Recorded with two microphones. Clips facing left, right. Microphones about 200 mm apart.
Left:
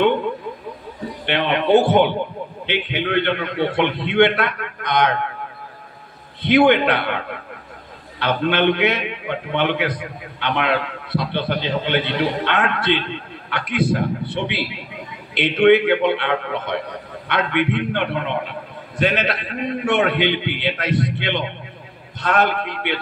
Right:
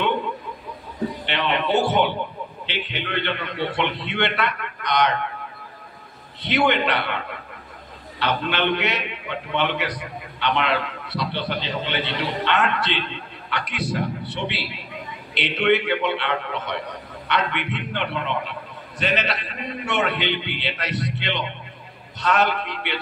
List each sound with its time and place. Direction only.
1.2 s a man's voice: 55° left (ahead or behind)
6.4 s a man's voice: 55° left (ahead or behind)
8.2 s a man's voice: 55° left (ahead or behind)